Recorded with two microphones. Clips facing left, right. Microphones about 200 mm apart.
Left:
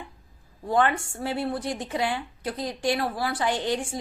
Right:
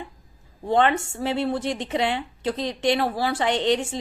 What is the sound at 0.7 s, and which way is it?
A woman's voice, 25° right (ahead or behind).